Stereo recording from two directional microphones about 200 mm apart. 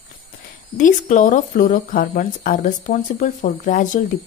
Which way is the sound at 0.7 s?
40° left (ahead or behind).